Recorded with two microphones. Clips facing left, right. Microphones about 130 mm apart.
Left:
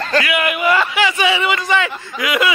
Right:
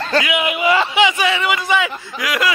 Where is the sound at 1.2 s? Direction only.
Centre (ahead or behind).